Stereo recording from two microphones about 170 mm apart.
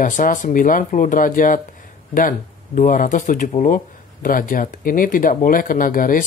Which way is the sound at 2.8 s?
55° left (ahead or behind).